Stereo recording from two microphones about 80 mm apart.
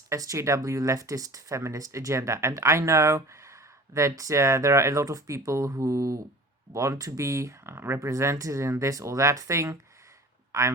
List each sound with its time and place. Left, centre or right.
0.1 s speech: right